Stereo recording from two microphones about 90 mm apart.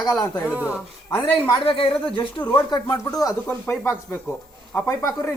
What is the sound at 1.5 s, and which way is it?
Speech, 80° left.